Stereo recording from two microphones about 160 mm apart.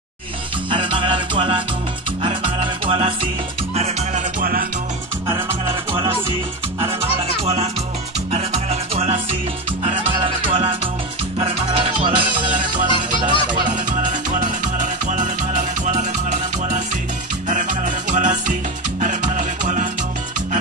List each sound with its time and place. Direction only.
0.7 s music: 30° right (ahead or behind); by 4.6 s 60° right (ahead or behind)
5.7 s music: 30° right (ahead or behind)
12.4 s music: 55° right (ahead or behind)